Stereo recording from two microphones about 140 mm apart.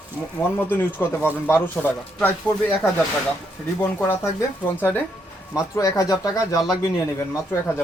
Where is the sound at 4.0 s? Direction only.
20° left (ahead or behind).